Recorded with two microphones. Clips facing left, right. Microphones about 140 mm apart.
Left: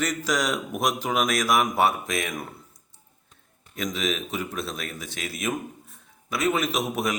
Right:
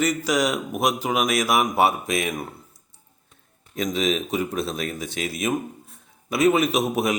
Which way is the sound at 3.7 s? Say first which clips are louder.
Right 5 dB; 25° right (ahead or behind).